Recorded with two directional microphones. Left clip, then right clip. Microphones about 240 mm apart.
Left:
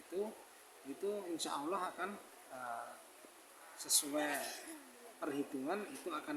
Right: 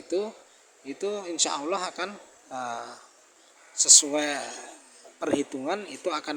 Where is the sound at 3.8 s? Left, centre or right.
Right.